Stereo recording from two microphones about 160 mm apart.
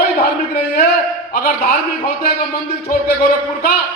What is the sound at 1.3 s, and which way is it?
Speech, 65° left (ahead or behind).